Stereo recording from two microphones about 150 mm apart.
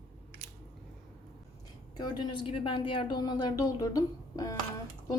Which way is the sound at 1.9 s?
30° left (ahead or behind).